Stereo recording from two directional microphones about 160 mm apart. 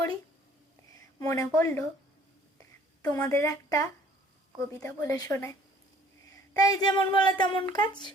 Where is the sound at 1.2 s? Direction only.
20° left (ahead or behind).